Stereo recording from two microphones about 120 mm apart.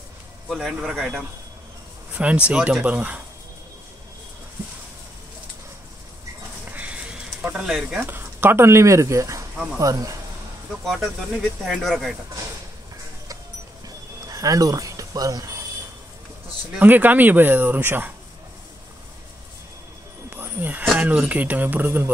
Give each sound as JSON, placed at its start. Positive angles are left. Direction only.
{"t": 0.5, "sound": "speech", "side_deg": -5}
{"t": 6.7, "sound": "a sound", "side_deg": -10}
{"t": 8.0, "sound": "speech", "side_deg": -15}
{"t": 10.9, "sound": "speech", "side_deg": 0}
{"t": 13.8, "sound": "music", "side_deg": -30}
{"t": 16.7, "sound": "speech", "side_deg": -15}
{"t": 20.2, "sound": "snake", "side_deg": -15}
{"t": 21.0, "sound": "speech", "side_deg": -15}